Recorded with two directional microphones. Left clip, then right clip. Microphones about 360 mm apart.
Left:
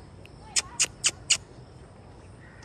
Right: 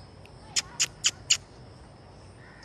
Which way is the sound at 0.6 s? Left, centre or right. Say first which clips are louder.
Left 1 dB; centre.